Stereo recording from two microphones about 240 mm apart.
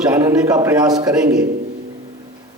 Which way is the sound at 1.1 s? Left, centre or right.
Centre.